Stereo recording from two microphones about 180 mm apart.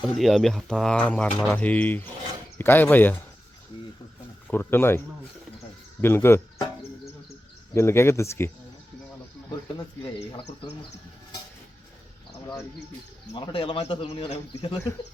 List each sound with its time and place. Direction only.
0.1 s speech: centre (ahead or behind)
3.7 s speech: 25° left (ahead or behind)
4.4 s speech: 10° left (ahead or behind)
7.7 s speech: 15° left (ahead or behind)
13.3 s speech: 25° left (ahead or behind)